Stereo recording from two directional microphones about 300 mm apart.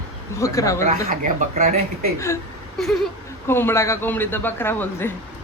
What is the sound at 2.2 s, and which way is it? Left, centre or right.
A man's voice, centre.